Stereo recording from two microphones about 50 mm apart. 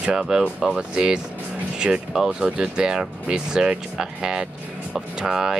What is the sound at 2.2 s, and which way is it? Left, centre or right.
Speech, centre.